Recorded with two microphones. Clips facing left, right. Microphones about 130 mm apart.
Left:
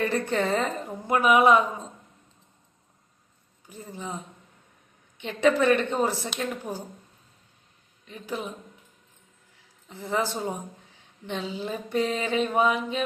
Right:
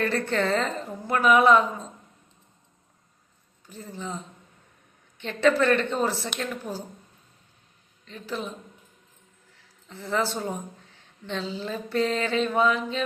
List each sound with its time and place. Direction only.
0.0 s mantra: 15° left (ahead or behind)
3.7 s mantra: 15° left (ahead or behind)
8.0 s mantra: 15° left (ahead or behind)
9.9 s mantra: 15° left (ahead or behind)